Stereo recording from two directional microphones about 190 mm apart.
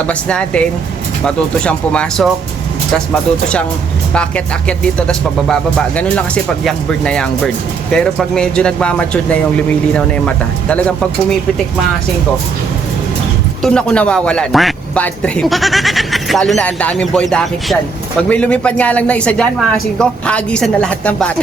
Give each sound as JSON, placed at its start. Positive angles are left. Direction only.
{"t": 0.1, "sound": "a man's voice", "side_deg": 5}
{"t": 4.1, "sound": "a man's voice", "side_deg": 5}
{"t": 13.6, "sound": "a man's voice", "side_deg": 5}